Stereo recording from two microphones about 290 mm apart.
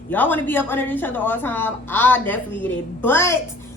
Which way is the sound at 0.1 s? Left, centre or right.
Centre.